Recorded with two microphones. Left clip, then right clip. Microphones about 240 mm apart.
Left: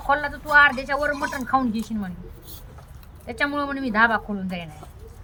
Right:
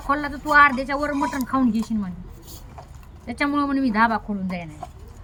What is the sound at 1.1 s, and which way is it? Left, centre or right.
Speech, left.